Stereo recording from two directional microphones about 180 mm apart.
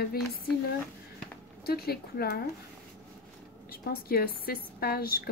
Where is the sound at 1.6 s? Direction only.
60° left (ahead or behind).